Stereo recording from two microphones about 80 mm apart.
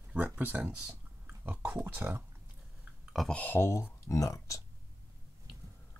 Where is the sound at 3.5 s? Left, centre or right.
Left.